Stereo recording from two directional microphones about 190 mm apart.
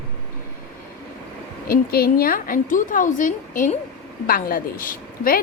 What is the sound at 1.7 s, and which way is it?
A woman's voice, 50° left (ahead or behind).